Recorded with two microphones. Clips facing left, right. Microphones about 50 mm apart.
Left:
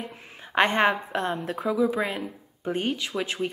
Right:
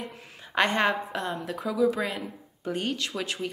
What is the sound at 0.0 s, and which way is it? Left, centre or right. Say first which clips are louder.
A woman's voice: left 1 dB; centre.